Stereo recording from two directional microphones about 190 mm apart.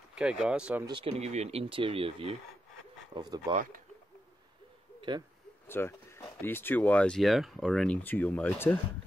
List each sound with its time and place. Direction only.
0.1 s speech: 5° right (ahead or behind)
0.8 s speech: 25° right (ahead or behind)
5.7 s speech: 15° left (ahead or behind)